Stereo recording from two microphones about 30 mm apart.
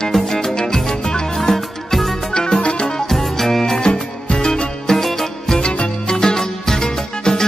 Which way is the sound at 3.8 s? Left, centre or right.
Left.